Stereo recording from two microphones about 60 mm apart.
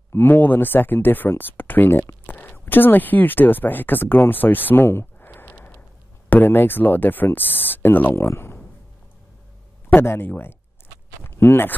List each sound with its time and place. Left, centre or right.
0.3 s speech: left
9.9 s speech: left